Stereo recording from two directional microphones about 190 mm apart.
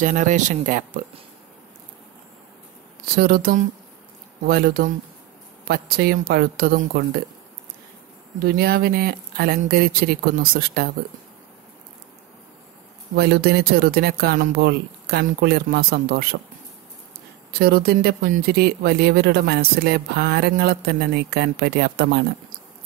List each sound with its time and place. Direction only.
0.0 s speech: 40° right (ahead or behind)
3.2 s speech: 50° right (ahead or behind)
8.5 s speech: 55° right (ahead or behind)
13.1 s speech: 55° right (ahead or behind)
17.5 s speech: 55° right (ahead or behind)